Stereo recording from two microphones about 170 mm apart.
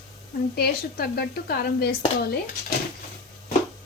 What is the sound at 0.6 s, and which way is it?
Speech, 70° left (ahead or behind).